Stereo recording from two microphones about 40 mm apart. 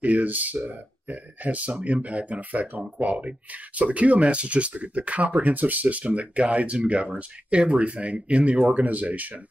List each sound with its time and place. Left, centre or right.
0.0 s speech: right